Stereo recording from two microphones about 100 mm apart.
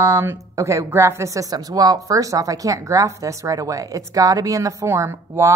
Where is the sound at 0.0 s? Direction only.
35° right (ahead or behind).